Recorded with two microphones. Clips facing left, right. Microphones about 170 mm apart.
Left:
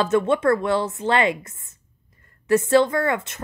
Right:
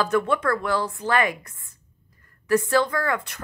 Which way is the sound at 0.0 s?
25° left (ahead or behind).